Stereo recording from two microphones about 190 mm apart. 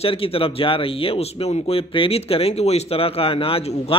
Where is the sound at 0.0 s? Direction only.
30° left (ahead or behind).